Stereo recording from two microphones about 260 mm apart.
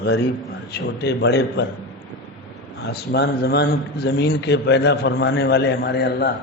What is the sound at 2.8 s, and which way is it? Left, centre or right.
A man's voice, left.